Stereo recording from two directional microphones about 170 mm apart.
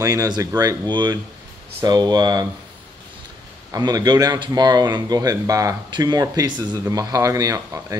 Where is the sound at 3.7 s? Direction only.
25° right (ahead or behind).